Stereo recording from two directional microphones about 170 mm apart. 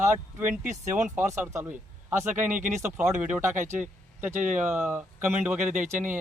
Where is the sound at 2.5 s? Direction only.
50° right (ahead or behind).